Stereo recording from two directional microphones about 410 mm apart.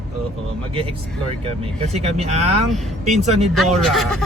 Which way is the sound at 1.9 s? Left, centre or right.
Centre.